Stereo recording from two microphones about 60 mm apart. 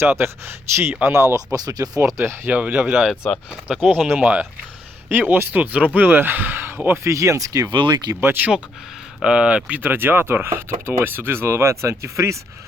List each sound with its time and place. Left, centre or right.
0.0 s speech: right
1.5 s speech: right
2.0 s speech: right
2.5 s speech: right
3.2 s speech: centre
3.8 s speech: centre
4.2 s speech: right
7.1 s speech: right
8.2 s speech: right
9.2 s speech: centre
9.8 s speech: right